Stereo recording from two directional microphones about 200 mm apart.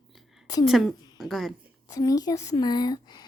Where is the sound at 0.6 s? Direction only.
Centre (ahead or behind).